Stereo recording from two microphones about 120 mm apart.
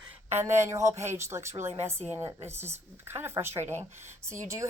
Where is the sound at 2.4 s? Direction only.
20° right (ahead or behind).